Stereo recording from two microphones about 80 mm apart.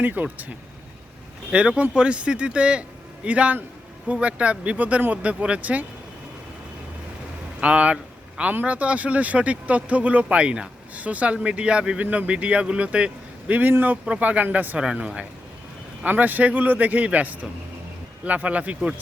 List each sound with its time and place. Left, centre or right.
0.0 s speech: right
7.6 s speech: centre